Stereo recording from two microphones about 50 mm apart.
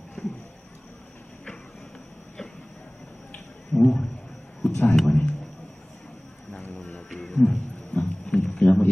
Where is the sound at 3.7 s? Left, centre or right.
Centre.